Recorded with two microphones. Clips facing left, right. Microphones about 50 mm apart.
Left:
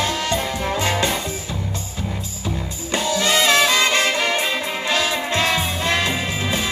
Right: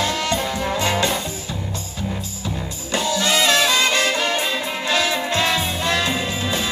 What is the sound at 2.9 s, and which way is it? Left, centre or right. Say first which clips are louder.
Music: left 1 dB; left.